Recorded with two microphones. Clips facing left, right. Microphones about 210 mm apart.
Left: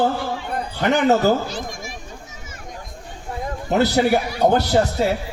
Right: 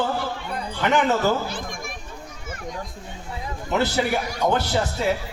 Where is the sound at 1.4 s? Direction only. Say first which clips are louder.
Left 2 dB; 55° right (ahead or behind).